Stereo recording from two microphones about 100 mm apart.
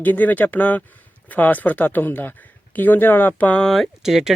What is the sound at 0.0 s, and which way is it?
Speech, 15° left (ahead or behind).